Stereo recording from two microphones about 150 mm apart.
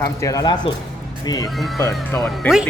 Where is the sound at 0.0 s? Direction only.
20° left (ahead or behind).